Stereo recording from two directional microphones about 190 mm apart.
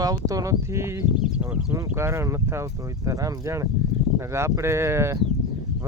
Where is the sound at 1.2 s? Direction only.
5° right (ahead or behind).